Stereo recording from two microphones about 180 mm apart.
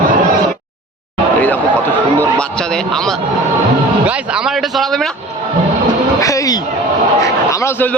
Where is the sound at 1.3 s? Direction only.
10° left (ahead or behind).